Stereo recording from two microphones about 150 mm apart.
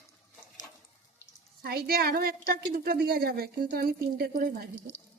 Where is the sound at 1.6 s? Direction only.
90° right.